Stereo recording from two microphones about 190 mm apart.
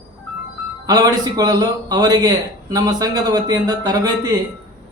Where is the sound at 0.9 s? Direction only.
20° right (ahead or behind).